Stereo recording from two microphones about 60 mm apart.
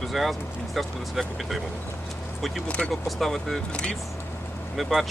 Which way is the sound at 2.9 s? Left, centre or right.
Centre.